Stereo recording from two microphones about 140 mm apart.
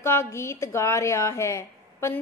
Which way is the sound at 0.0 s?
15° left (ahead or behind).